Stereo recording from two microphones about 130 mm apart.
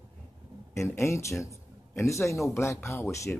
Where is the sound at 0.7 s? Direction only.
20° left (ahead or behind).